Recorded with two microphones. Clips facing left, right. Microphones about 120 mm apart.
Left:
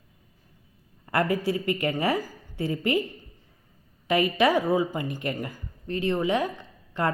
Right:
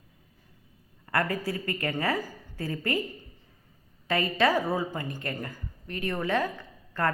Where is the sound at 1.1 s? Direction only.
25° left (ahead or behind).